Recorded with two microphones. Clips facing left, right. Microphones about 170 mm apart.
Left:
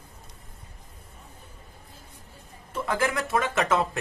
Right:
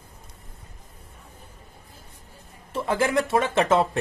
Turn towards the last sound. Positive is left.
turn(degrees=-30)  # may be behind; listen again after turning